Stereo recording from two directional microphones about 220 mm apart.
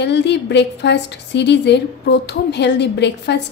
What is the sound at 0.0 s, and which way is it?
A woman's voice, 50° left (ahead or behind).